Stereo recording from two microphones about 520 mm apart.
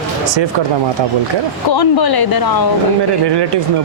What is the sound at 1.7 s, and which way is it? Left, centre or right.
Speech, left.